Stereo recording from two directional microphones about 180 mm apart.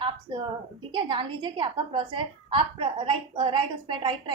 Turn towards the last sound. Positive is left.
turn(degrees=-25)  # may be behind; listen again after turning